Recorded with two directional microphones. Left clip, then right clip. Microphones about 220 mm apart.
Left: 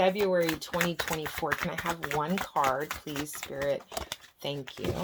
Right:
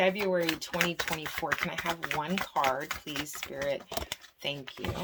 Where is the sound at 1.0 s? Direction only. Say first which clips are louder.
Left 1 dB; 20° left (ahead or behind).